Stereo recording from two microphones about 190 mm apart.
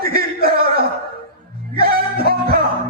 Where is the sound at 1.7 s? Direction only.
50° right (ahead or behind).